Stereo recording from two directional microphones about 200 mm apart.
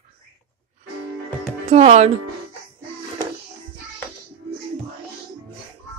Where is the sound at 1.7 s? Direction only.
30° right (ahead or behind).